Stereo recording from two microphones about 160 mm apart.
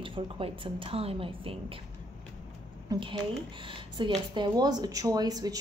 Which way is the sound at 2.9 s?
30° right (ahead or behind).